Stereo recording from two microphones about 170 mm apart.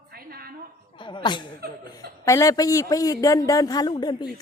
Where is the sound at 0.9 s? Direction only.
30° left (ahead or behind).